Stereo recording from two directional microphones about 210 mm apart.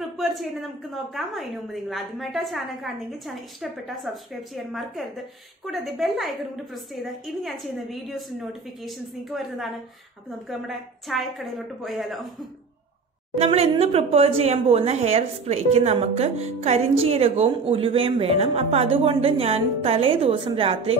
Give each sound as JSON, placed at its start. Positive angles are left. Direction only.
{"t": 0.2, "sound": "a woman's voice", "side_deg": 0}
{"t": 10.7, "sound": "a woman's voice", "side_deg": 0}
{"t": 13.4, "sound": "speech", "side_deg": -30}